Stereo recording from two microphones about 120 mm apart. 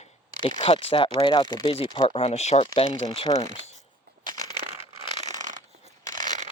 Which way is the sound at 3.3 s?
70° left (ahead or behind).